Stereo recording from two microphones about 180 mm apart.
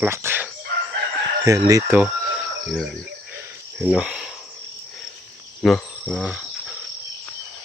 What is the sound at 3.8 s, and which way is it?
Cricket, 5° right (ahead or behind).